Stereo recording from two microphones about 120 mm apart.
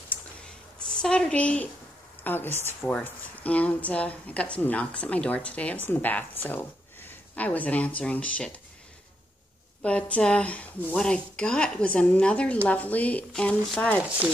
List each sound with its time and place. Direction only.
0.7 s a woman's voice: 5° left (ahead or behind)
9.8 s speech: 10° left (ahead or behind)